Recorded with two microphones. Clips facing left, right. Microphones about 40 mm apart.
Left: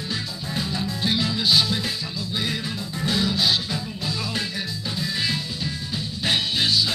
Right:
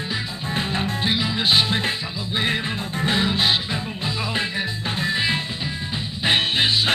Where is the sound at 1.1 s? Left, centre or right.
Right.